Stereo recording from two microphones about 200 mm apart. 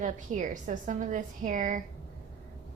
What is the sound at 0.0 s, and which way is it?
A woman's voice, 40° right (ahead or behind).